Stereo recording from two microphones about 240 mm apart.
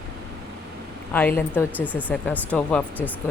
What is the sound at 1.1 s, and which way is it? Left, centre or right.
Speech, centre.